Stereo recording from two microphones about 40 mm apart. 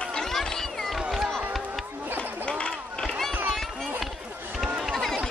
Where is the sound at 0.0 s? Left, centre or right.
Centre.